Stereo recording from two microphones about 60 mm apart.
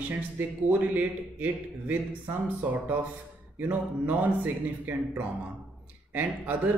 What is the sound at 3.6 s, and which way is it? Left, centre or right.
A man's voice, right.